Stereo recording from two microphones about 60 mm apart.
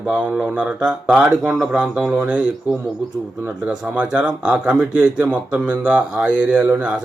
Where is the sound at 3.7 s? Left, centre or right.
Centre.